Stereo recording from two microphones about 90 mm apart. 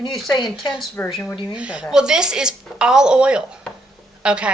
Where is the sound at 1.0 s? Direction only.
20° left (ahead or behind).